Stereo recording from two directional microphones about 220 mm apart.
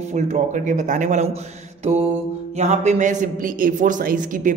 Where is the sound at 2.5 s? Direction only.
30° right (ahead or behind).